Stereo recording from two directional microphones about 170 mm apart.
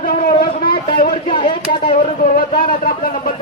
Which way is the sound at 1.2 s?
30° left (ahead or behind).